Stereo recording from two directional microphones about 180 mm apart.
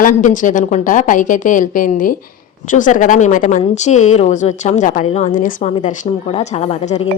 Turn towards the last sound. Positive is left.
turn(degrees=35)  # may be behind; listen again after turning